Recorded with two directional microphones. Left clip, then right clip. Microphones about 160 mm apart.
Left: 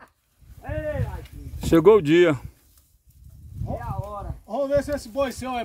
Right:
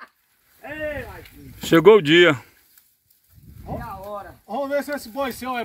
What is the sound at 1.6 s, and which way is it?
Speech, 10° left (ahead or behind).